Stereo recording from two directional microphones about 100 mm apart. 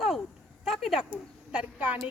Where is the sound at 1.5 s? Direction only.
15° right (ahead or behind).